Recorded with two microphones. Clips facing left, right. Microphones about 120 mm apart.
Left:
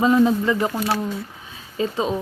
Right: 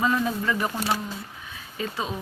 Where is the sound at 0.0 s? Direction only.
20° left (ahead or behind).